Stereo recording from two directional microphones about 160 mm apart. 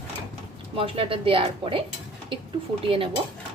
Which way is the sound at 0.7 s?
35° right (ahead or behind).